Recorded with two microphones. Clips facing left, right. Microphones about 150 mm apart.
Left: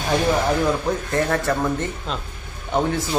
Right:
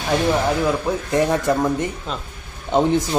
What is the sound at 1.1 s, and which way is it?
Speech, 15° right (ahead or behind).